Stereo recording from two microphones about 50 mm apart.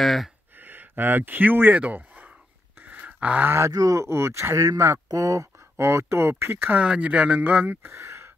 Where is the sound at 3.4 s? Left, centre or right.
Right.